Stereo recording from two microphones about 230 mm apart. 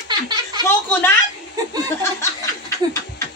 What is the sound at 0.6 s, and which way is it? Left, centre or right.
Speech, centre.